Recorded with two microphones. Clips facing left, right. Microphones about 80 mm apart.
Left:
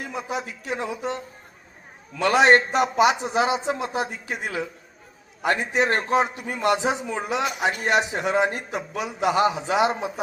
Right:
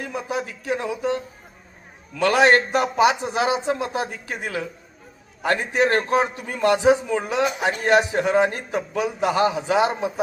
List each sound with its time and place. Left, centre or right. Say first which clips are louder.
0.2 s a man's voice: right 2 dB; left